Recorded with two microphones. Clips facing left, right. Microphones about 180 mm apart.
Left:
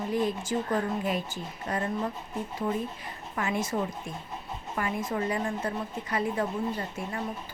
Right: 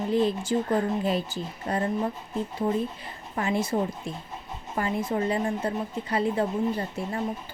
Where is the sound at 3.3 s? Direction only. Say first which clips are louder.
Right 4 dB; 30° right (ahead or behind).